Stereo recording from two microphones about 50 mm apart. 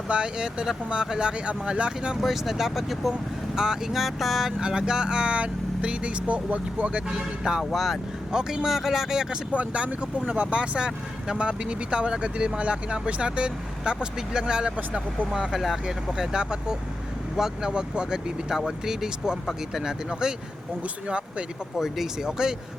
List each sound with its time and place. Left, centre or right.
0.1 s speech: centre
2.2 s speech: centre
3.9 s speech: centre
4.6 s speech: centre
7.6 s speech: centre
8.3 s speech: centre
9.6 s speech: right; by 17.7 s centre
17.7 s speech: centre
21.8 s speech: centre